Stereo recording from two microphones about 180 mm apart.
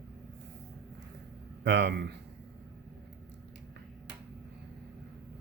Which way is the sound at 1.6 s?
75° right (ahead or behind).